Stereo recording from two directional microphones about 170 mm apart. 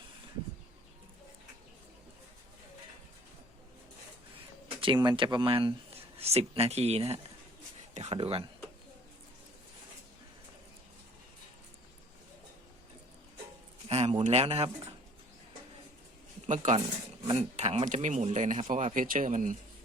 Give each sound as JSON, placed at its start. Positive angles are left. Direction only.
{"t": 4.8, "sound": "speech", "side_deg": -30}
{"t": 13.8, "sound": "speech", "side_deg": -35}
{"t": 16.5, "sound": "speech", "side_deg": -45}